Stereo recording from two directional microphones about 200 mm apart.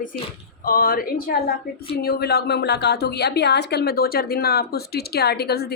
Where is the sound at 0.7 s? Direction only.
45° left (ahead or behind).